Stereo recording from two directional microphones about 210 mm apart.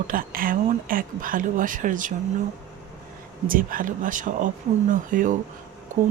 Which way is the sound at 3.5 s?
40° right (ahead or behind).